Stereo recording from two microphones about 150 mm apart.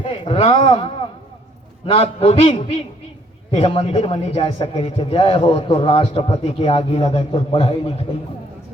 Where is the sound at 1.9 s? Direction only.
40° left (ahead or behind).